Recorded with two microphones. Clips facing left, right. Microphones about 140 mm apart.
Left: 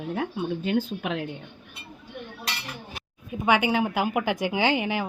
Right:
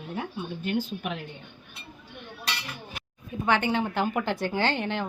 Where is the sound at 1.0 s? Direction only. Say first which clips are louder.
Left 4 dB; 90° left.